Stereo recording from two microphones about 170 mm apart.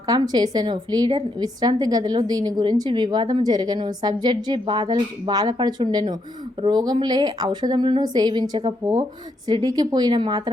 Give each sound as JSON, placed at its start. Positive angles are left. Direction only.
{"t": 0.0, "sound": "a woman's voice", "side_deg": -25}